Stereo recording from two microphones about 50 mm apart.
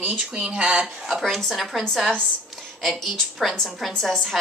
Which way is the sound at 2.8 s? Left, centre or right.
Centre.